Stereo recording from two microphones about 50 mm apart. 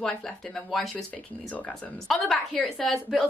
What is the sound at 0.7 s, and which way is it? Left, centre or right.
Speech, centre.